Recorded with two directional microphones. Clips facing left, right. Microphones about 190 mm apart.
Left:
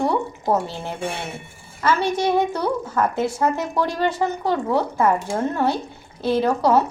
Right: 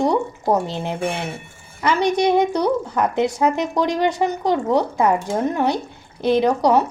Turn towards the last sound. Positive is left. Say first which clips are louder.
# right 2 dB
turn(degrees=-15)  # may be behind; listen again after turning